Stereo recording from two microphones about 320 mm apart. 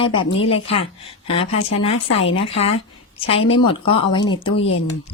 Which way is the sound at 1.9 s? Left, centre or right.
Left.